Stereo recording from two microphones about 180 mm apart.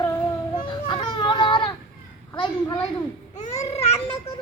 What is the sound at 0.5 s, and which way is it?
Children playing, 25° left (ahead or behind).